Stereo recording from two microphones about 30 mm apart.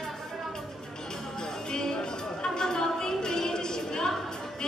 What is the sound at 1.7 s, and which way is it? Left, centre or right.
Music, left.